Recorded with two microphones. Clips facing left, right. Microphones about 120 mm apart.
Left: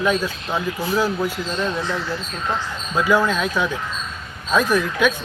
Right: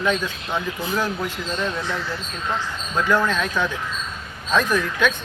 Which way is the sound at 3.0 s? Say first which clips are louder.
Left 2 dB; 10° left (ahead or behind).